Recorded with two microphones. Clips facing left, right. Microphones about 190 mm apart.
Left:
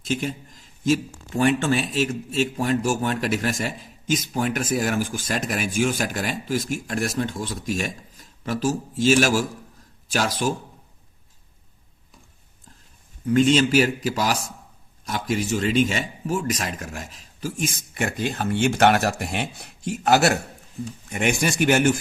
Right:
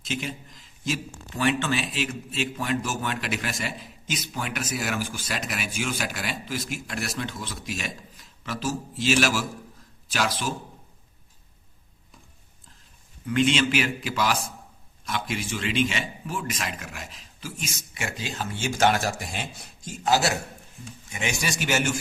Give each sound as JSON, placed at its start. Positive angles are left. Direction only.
{"t": 0.0, "sound": "a man's voice", "side_deg": 45}
{"t": 13.2, "sound": "a man's voice", "side_deg": 40}